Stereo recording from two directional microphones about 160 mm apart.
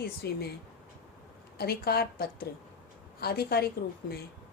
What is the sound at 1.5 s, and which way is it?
A woman's voice, 80° left.